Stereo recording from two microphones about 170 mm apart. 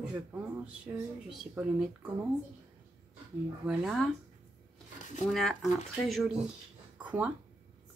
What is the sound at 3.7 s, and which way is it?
Speech, 5° right (ahead or behind).